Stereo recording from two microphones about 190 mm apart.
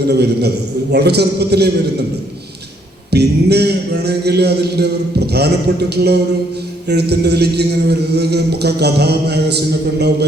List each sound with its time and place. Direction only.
0.1 s a man's voice: 60° right (ahead or behind)
3.1 s a man's voice: 60° right (ahead or behind)